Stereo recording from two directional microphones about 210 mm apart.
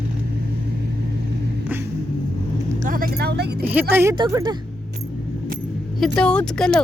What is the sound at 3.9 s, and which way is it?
Speech, 10° right (ahead or behind).